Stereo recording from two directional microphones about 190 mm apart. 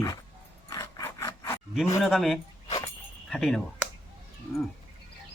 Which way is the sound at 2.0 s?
Centre (ahead or behind).